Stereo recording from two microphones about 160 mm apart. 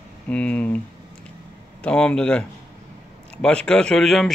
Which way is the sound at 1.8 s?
5° left (ahead or behind).